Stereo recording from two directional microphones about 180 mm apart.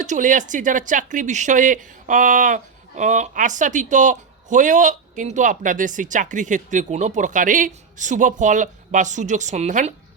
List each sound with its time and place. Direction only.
0.0 s speech: 45° right (ahead or behind)